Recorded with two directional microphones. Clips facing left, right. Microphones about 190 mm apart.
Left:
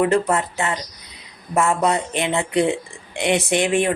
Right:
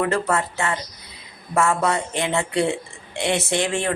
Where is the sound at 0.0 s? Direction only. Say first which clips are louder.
Left 3 dB; 20° left (ahead or behind).